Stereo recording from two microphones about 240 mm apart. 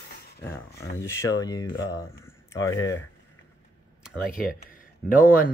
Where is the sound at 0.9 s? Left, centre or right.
Centre.